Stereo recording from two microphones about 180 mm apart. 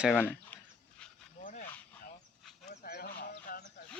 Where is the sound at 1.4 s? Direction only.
40° left (ahead or behind).